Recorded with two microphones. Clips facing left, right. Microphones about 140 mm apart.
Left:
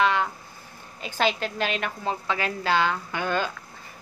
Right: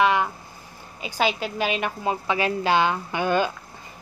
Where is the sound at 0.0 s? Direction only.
15° right (ahead or behind).